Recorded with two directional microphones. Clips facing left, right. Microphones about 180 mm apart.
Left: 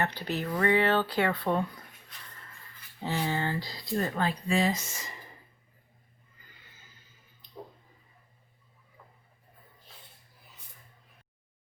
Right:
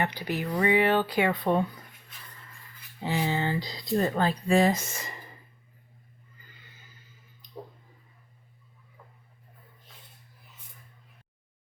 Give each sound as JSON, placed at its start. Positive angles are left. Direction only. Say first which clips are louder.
{"t": 0.0, "sound": "speech", "louder": "right 1 dB", "side_deg": -15}
{"t": 3.0, "sound": "speech", "louder": "right 2 dB", "side_deg": -15}
{"t": 4.1, "sound": "speech", "louder": "right 5 dB", "side_deg": -35}